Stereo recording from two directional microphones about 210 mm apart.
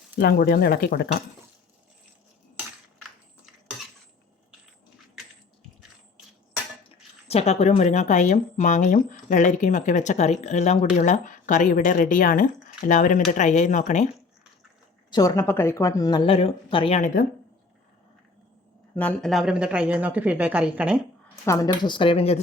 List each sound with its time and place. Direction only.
0.2 s speech: 50° left (ahead or behind)
7.3 s speech: 30° left (ahead or behind)
15.1 s speech: 15° left (ahead or behind)
18.9 s a woman's voice: 5° left (ahead or behind)
21.4 s speech: 15° left (ahead or behind)